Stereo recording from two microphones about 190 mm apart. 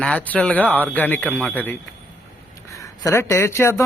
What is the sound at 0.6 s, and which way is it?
Speech, 10° right (ahead or behind).